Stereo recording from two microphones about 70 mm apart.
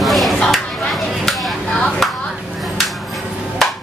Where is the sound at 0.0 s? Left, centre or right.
Centre.